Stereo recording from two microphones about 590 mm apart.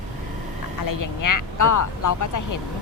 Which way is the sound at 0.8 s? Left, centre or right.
Left.